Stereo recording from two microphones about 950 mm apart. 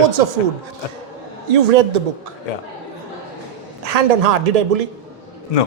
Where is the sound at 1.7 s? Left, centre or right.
Right.